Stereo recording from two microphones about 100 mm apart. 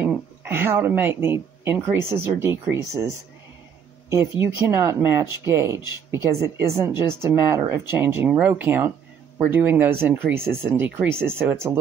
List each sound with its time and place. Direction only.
0.5 s speech: 25° right (ahead or behind)